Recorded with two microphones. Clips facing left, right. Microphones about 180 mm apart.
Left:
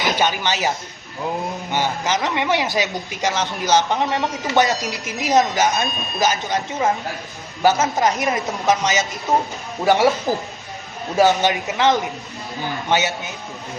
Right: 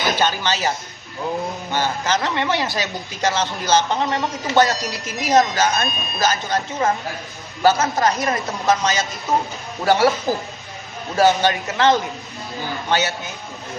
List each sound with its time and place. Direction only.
0.0 s speech: 20° left (ahead or behind)
1.7 s a man's voice: 20° left (ahead or behind)
4.2 s speech: centre (ahead or behind)
4.5 s a man's voice: 20° left (ahead or behind)